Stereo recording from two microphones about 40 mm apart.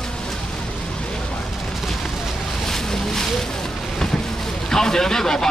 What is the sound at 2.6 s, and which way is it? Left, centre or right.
Boat, centre.